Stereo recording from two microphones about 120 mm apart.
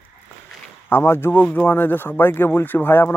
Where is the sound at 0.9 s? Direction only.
20° left (ahead or behind).